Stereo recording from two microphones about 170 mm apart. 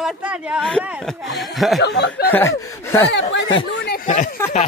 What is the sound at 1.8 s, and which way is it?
Speech, 85° left.